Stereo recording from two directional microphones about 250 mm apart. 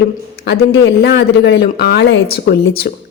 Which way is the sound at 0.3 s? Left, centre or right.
Left.